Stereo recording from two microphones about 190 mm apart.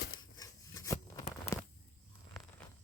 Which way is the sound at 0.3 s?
20° left (ahead or behind).